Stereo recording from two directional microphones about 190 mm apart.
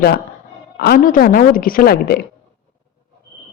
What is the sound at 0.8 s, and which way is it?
Speech, 50° left (ahead or behind).